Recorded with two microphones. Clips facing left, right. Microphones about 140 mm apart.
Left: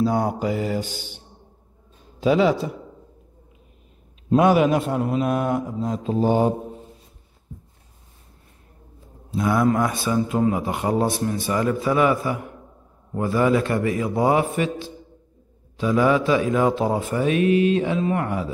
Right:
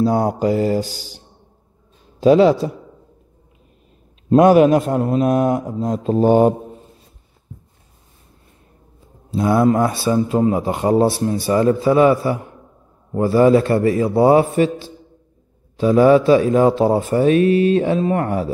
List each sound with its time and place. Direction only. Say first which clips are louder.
0.0 s a man's voice: right 5 dB; 35° right (ahead or behind)
4.3 s a man's voice: right 6 dB; 45° right (ahead or behind)
9.3 s a man's voice: right 5 dB; 30° right (ahead or behind)